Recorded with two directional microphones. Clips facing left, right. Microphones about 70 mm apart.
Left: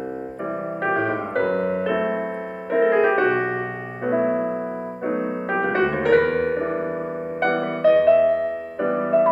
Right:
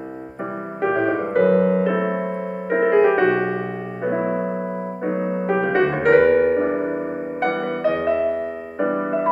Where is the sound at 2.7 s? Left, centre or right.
Right.